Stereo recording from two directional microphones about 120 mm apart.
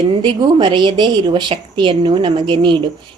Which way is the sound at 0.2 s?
40° right (ahead or behind).